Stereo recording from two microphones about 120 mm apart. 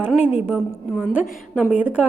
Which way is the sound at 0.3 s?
15° right (ahead or behind).